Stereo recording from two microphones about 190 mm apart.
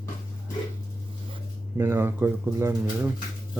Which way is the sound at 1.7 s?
15° right (ahead or behind).